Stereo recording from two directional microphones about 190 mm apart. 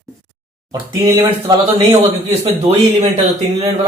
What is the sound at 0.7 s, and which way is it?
Speech, 15° right (ahead or behind).